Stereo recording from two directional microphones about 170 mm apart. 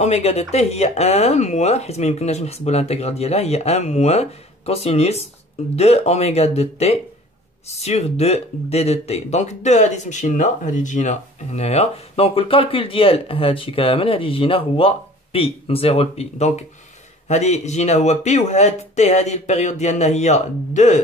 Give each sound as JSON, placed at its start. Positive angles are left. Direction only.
{"t": 0.0, "sound": "speech", "side_deg": 40}